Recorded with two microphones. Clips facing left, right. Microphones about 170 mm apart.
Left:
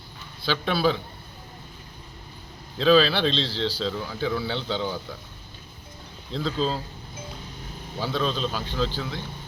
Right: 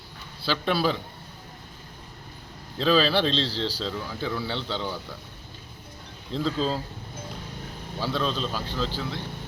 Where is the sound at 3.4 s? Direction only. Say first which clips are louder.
Left 1 dB; 40° right (ahead or behind).